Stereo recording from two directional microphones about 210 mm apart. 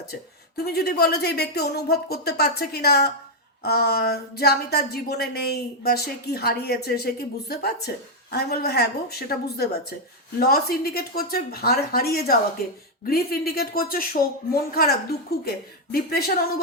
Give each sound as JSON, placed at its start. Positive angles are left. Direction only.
{"t": 0.1, "sound": "speech", "side_deg": 50}